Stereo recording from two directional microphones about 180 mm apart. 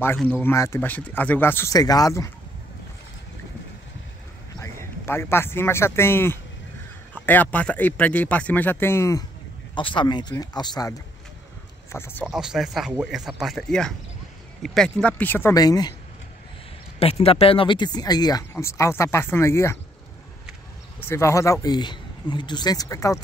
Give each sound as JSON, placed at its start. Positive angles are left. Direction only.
{"t": 0.4, "sound": "speech", "side_deg": 15}
{"t": 5.0, "sound": "speech", "side_deg": 15}
{"t": 9.8, "sound": "speech", "side_deg": 25}
{"t": 12.3, "sound": "speech", "side_deg": -5}
{"t": 17.0, "sound": "speech", "side_deg": 35}
{"t": 21.1, "sound": "speech", "side_deg": 15}